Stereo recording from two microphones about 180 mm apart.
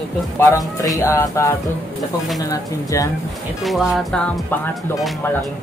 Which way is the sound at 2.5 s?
20° left (ahead or behind).